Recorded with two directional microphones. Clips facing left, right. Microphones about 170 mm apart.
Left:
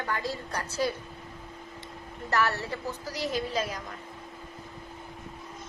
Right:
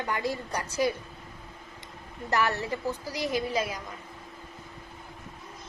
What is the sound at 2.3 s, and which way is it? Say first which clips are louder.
A woman's voice: right 1 dB; 15° right (ahead or behind).